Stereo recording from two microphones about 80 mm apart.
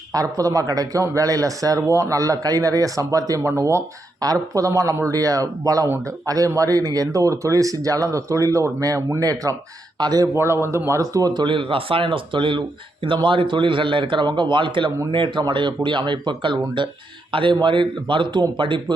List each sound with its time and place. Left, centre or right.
0.1 s speech: right
4.2 s speech: right
10.0 s speech: right
10.3 s a man's voice: right
11.4 s speech: right